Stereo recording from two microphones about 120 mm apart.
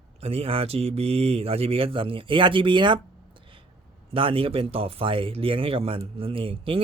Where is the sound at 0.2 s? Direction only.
55° right (ahead or behind).